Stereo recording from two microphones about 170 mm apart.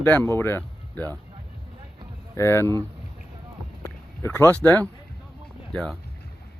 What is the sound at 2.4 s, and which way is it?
Speech, 15° left (ahead or behind).